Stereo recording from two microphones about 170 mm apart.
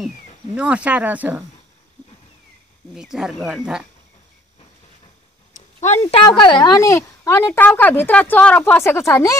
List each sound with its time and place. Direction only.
0.6 s speech: 5° right (ahead or behind)
2.9 s speech: 5° right (ahead or behind)
5.5 s a sound: 45° left (ahead or behind)
6.0 s a woman's voice: 30° left (ahead or behind)